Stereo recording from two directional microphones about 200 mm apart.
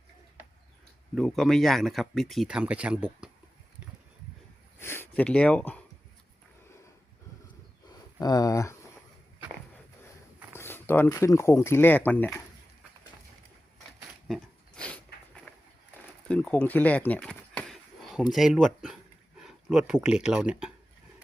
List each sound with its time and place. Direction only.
1.1 s speech: centre (ahead or behind)
4.8 s speech: 10° left (ahead or behind)
7.9 s a sound: 20° left (ahead or behind)
10.5 s speech: 10° left (ahead or behind)
14.3 s a sound: 5° left (ahead or behind)
18.3 s speech: centre (ahead or behind)